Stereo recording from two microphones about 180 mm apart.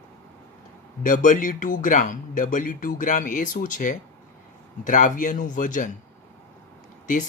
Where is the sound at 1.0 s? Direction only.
45° left (ahead or behind).